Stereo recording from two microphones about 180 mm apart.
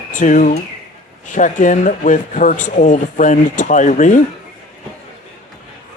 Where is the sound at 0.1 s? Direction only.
45° left (ahead or behind).